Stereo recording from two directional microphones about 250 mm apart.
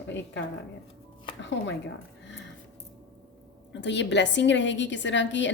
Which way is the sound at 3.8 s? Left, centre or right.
Left.